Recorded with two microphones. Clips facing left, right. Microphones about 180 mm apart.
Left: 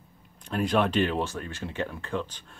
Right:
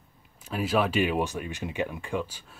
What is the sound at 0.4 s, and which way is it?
Speech, 5° right (ahead or behind).